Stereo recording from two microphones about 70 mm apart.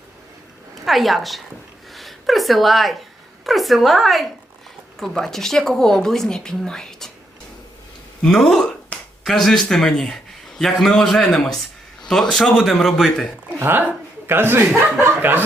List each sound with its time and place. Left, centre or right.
0.9 s a woman's voice: centre
8.2 s speech: centre
13.6 s speech: right
15.0 s a sound: right